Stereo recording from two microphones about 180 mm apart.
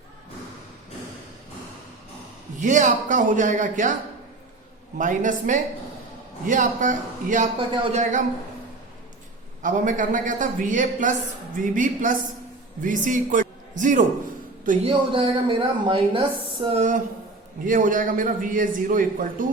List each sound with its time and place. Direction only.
2.6 s a man's voice: 45° right (ahead or behind)
4.9 s a man's voice: 45° right (ahead or behind)
7.7 s speech: 30° right (ahead or behind)
9.6 s a man's voice: 45° right (ahead or behind)
14.8 s speech: 30° right (ahead or behind)
17.7 s a man's voice: 50° right (ahead or behind)